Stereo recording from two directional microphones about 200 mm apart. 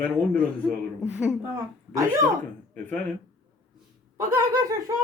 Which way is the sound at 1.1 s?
5° right (ahead or behind).